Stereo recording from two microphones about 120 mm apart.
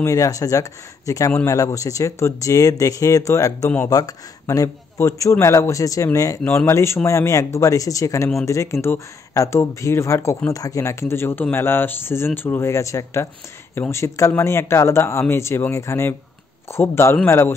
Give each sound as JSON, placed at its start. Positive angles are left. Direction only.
{"t": 0.0, "sound": "speech", "side_deg": 30}